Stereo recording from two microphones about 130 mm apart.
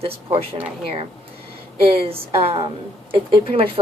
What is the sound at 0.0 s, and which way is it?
A woman's voice, 50° right (ahead or behind).